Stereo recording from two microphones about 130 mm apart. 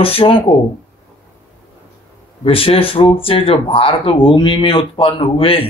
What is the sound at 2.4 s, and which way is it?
Speech, 45° left (ahead or behind).